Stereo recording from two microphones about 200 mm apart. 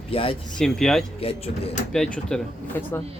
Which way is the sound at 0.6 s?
5° left (ahead or behind).